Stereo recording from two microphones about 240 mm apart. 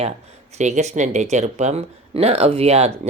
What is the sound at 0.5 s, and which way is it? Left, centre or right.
Speech, right.